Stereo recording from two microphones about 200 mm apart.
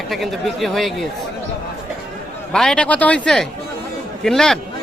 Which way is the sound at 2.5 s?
5° left (ahead or behind).